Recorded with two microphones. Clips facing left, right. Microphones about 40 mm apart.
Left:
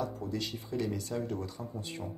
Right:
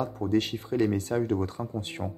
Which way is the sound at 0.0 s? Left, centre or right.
Right.